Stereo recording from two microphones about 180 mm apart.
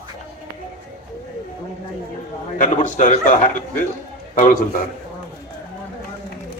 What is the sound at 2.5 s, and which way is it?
A man's voice, 45° left (ahead or behind).